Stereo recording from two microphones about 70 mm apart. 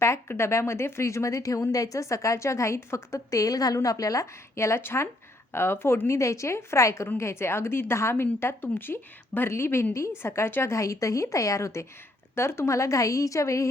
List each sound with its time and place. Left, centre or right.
0.0 s a woman's voice: left